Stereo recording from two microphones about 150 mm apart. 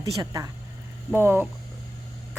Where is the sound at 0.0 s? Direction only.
25° right (ahead or behind).